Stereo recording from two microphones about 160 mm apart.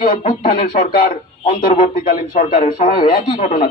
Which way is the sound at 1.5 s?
60° left (ahead or behind).